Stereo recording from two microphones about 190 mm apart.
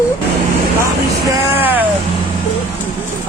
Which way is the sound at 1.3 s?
10° right (ahead or behind).